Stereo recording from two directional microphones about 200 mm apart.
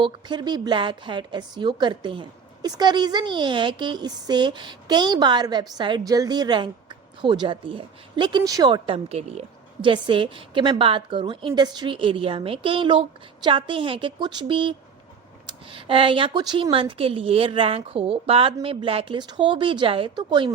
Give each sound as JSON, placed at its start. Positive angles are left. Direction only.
{"t": 0.0, "sound": "a woman's voice", "side_deg": -20}